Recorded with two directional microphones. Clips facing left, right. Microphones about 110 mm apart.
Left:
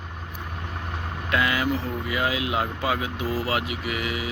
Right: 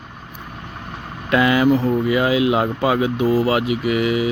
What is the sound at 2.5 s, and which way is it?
Speech, 75° right (ahead or behind).